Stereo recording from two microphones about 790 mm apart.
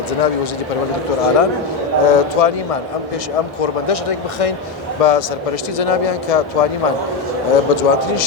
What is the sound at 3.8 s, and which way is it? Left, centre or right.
A man's voice, left.